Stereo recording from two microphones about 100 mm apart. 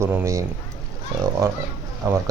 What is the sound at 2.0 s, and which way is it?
Speech, 35° right (ahead or behind).